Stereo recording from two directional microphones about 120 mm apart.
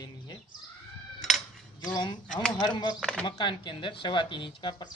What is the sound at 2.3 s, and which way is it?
Speech, 5° left (ahead or behind).